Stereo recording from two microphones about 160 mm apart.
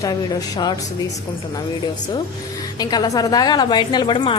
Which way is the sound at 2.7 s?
25° left (ahead or behind).